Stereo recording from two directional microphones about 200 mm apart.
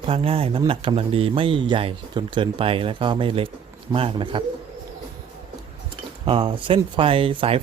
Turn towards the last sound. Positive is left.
turn(degrees=-30)  # may be behind; listen again after turning